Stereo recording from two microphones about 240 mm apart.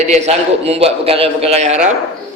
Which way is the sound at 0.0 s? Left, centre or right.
Right.